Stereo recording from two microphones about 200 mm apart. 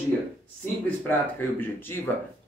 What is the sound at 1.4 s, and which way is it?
Speech, 10° left (ahead or behind).